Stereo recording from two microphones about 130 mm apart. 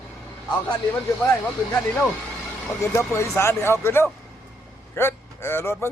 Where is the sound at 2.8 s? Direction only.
20° left (ahead or behind).